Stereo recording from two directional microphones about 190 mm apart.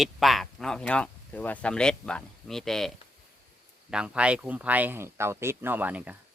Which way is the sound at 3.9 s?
5° right (ahead or behind).